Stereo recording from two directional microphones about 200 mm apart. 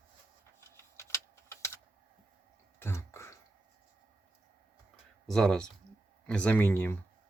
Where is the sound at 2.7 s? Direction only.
10° left (ahead or behind).